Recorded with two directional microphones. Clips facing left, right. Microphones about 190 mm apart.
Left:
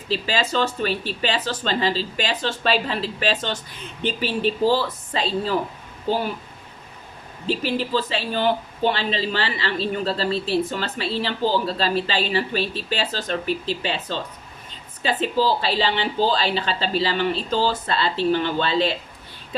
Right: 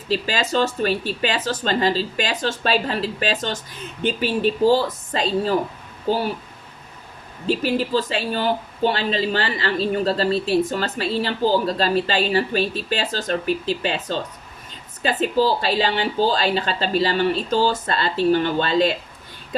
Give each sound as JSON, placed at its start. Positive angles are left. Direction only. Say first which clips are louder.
{"t": 0.1, "sound": "speech", "louder": "right 2 dB", "side_deg": -45}
{"t": 7.4, "sound": "speech", "louder": "right 3 dB", "side_deg": -45}